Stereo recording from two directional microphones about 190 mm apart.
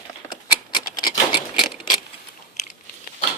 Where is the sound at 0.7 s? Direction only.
25° left (ahead or behind).